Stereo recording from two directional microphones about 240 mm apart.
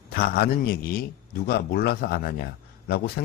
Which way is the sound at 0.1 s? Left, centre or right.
Left.